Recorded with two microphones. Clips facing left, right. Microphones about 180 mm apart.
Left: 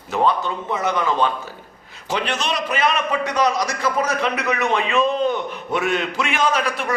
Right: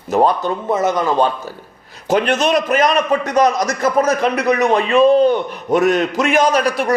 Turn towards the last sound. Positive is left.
turn(degrees=-40)  # may be behind; listen again after turning